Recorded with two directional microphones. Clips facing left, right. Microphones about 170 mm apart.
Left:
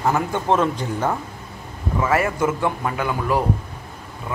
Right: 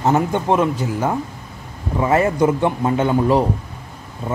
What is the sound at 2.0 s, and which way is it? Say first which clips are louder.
Speech: right 4 dB; 20° right (ahead or behind).